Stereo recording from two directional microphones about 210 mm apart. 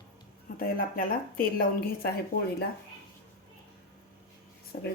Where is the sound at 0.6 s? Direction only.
45° left (ahead or behind).